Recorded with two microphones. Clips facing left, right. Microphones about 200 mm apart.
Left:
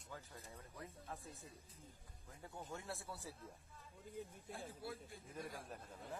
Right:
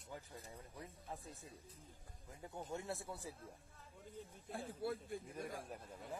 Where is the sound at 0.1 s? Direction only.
15° right (ahead or behind).